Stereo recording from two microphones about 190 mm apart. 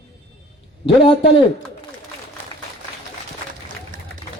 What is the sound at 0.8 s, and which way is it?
Speech, 30° left (ahead or behind).